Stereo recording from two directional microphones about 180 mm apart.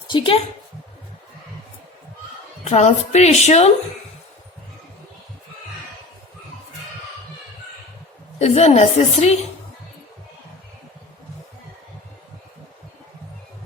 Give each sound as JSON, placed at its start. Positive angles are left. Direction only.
{"t": 0.1, "sound": "a woman's voice", "side_deg": 30}
{"t": 2.6, "sound": "a woman's voice", "side_deg": 40}
{"t": 8.4, "sound": "a woman's voice", "side_deg": 40}